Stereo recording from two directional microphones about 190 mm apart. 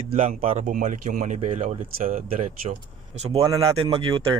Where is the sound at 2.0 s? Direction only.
45° right (ahead or behind).